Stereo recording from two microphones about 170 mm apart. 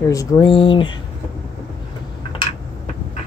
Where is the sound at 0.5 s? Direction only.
30° left (ahead or behind).